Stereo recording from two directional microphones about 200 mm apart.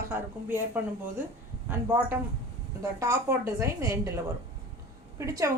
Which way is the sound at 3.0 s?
15° right (ahead or behind).